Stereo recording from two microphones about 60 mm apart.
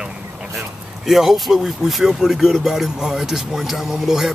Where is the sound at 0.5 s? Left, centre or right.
Centre.